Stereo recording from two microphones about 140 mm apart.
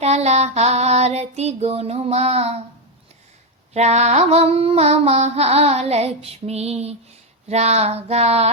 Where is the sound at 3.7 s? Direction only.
50° right (ahead or behind).